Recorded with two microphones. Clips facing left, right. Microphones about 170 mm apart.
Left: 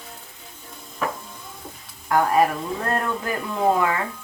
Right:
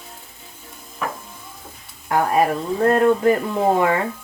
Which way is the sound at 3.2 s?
30° right (ahead or behind).